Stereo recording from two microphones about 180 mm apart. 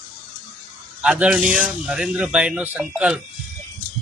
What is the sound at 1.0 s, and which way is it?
Speech, 5° right (ahead or behind).